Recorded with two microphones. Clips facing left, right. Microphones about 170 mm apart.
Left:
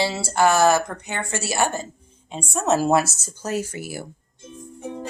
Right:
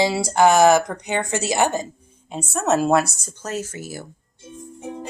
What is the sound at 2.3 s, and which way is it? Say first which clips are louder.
Speech: right 1 dB; centre (ahead or behind).